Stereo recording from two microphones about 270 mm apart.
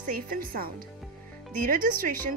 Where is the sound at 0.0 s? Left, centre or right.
Right.